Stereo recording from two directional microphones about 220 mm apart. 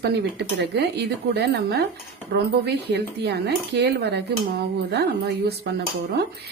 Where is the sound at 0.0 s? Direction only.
50° right (ahead or behind).